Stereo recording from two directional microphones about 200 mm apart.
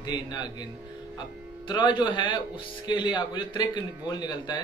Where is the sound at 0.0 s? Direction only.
20° left (ahead or behind).